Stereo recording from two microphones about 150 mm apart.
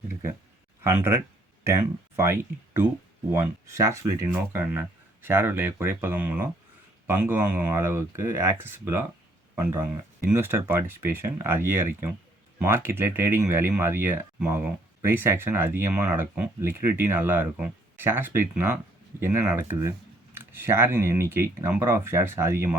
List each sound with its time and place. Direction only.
0.9 s speech: 15° right (ahead or behind)
10.3 s speech: 15° right (ahead or behind)